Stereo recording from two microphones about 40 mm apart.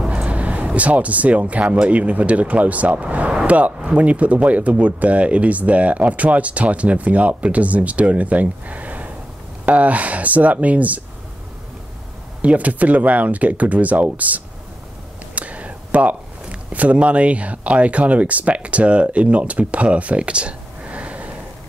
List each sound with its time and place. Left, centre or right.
0.1 s speech: right
12.4 s speech: right
15.3 s a sound: right
16.7 s speech: right